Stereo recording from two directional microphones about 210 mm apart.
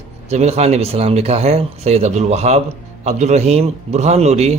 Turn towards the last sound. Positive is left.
turn(degrees=-30)  # may be behind; listen again after turning